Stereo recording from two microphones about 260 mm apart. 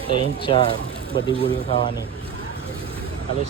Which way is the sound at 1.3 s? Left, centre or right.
Right.